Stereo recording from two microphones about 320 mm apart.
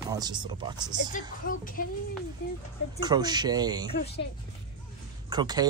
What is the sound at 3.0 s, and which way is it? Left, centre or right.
Speech, centre.